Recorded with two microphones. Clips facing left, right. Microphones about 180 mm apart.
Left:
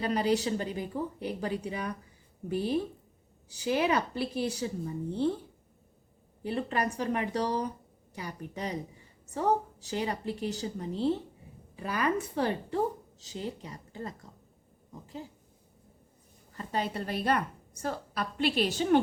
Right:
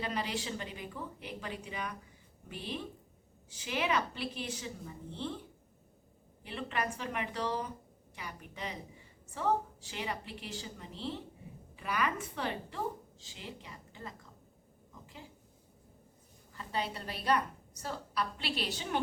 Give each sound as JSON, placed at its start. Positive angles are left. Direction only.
{"t": 0.0, "sound": "a woman's voice", "side_deg": 40}
{"t": 6.4, "sound": "a woman's voice", "side_deg": 40}
{"t": 16.6, "sound": "a woman's voice", "side_deg": 45}